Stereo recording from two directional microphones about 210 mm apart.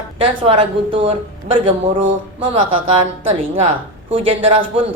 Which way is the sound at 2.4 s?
25° right (ahead or behind).